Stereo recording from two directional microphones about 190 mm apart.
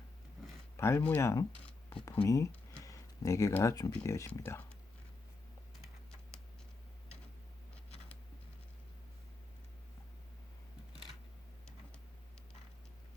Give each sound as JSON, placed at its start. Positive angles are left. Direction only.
{"t": 0.8, "sound": "speech", "side_deg": 15}